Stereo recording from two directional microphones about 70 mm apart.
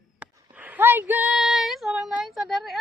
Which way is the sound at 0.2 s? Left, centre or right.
Right.